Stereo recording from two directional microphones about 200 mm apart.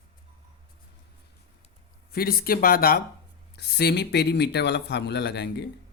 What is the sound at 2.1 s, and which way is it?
A man's voice, 50° left (ahead or behind).